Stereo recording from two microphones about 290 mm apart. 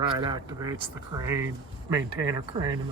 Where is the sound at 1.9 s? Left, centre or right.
Centre.